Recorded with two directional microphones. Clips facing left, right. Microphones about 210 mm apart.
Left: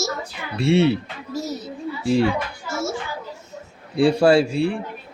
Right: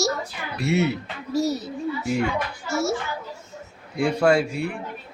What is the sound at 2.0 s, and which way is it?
Speech, 30° left (ahead or behind).